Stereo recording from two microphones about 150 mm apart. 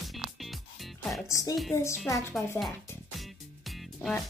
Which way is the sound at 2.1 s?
20° left (ahead or behind).